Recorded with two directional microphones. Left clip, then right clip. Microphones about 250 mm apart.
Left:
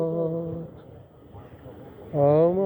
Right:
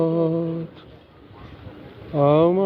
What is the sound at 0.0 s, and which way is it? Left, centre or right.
Humming, right.